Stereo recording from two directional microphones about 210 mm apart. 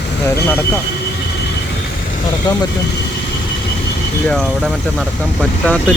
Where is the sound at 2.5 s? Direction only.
20° left (ahead or behind).